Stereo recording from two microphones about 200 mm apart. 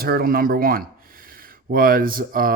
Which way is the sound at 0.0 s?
50° right (ahead or behind).